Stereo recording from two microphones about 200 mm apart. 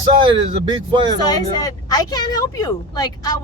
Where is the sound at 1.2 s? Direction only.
20° left (ahead or behind).